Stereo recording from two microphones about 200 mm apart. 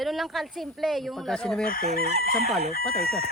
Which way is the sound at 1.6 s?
45° left (ahead or behind).